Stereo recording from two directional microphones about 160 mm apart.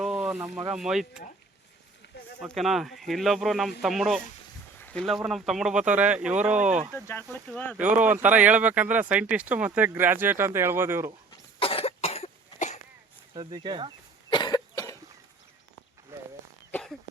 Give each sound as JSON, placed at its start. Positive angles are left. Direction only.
{"t": 0.0, "sound": "a sound", "side_deg": -5}
{"t": 0.7, "sound": "speech", "side_deg": 0}
{"t": 2.5, "sound": "speech", "side_deg": 0}
{"t": 4.8, "sound": "a sound", "side_deg": 10}
{"t": 5.0, "sound": "speech", "side_deg": 0}
{"t": 6.9, "sound": "speech", "side_deg": 15}
{"t": 7.8, "sound": "speech", "side_deg": -10}
{"t": 11.3, "sound": "cough", "side_deg": 35}
{"t": 13.3, "sound": "speech", "side_deg": -30}
{"t": 14.3, "sound": "cough", "side_deg": 25}
{"t": 16.1, "sound": "a sound", "side_deg": -15}